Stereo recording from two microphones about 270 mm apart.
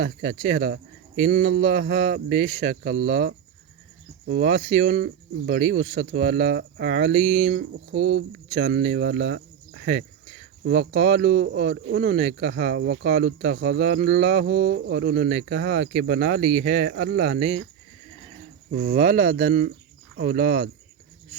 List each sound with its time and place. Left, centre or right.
0.0 s speech: right
18.7 s speech: right